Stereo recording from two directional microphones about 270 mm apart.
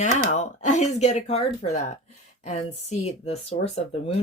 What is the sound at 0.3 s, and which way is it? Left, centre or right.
Speech, left.